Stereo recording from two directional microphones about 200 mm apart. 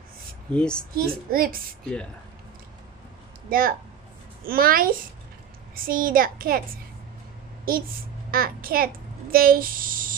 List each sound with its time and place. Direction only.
0.5 s speech: 5° left (ahead or behind)
0.9 s a child's voice: 45° right (ahead or behind)
3.4 s a child's voice: 45° right (ahead or behind)
8.3 s a child's voice: 45° right (ahead or behind)